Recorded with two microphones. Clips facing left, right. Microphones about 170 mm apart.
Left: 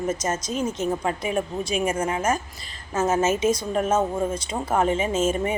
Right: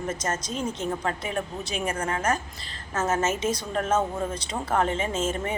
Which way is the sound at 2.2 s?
10° left (ahead or behind).